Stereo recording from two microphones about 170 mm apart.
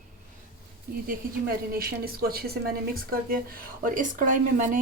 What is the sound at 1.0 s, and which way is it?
A woman's voice, 60° right (ahead or behind).